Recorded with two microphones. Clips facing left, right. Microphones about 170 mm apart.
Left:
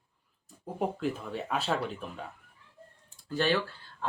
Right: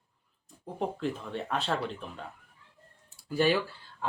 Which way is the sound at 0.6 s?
5° left (ahead or behind).